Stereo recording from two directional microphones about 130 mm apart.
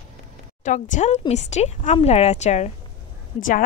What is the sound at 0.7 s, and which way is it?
A woman's voice, 70° left (ahead or behind).